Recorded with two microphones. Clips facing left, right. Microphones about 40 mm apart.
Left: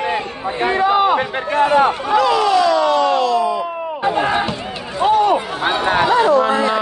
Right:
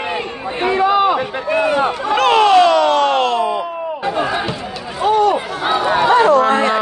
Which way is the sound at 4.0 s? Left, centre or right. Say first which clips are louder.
Left 3 dB; left.